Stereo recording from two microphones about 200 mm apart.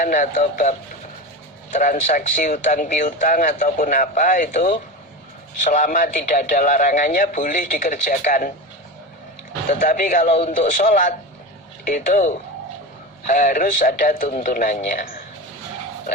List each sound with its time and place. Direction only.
0.0 s speech: 40° left (ahead or behind)
9.6 s speech: 40° left (ahead or behind)